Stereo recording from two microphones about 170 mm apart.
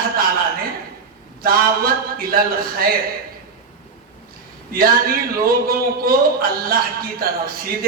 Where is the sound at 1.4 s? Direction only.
60° right (ahead or behind).